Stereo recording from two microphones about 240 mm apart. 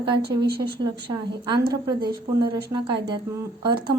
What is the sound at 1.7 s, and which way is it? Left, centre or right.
A woman's voice, centre.